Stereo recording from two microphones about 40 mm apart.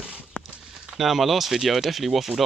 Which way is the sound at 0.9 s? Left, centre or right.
Centre.